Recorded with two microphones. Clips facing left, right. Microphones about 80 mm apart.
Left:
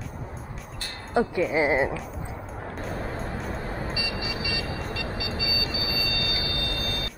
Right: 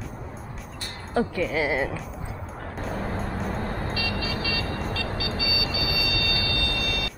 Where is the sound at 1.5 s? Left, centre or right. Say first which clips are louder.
Left 4 dB; left.